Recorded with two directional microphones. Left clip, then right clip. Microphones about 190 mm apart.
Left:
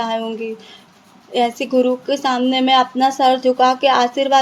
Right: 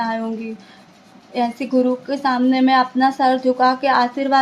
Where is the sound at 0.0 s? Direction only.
30° left (ahead or behind).